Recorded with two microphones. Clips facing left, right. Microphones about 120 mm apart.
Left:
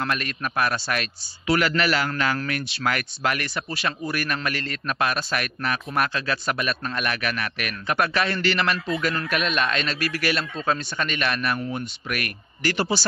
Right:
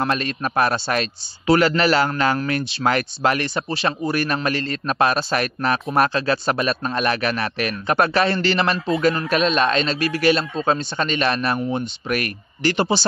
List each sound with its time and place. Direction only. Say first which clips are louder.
0.0 s a man's voice: right 5 dB; 30° right (ahead or behind)